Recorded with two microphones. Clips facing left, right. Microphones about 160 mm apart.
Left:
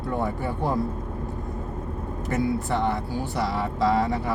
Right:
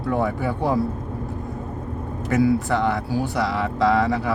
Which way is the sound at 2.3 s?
90° right.